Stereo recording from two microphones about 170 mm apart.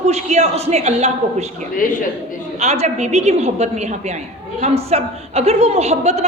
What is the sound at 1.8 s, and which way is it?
Speech, 55° left (ahead or behind).